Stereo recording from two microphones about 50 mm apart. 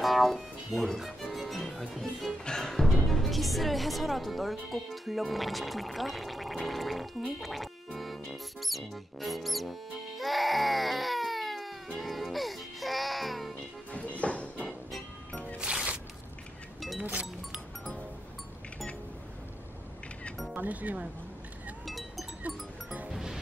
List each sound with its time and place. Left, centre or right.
0.0 s music: centre
3.1 s speech: centre
12.0 s music: centre
13.9 s music: left
15.6 s music: right
17.0 s speech: right
20.5 s speech: right
21.8 s sheep: centre
23.0 s music: centre